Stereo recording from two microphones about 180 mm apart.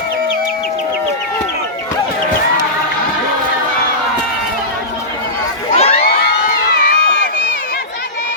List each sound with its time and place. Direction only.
5.7 s crowd: 35° left (ahead or behind)
6.0 s crowd: 60° left (ahead or behind)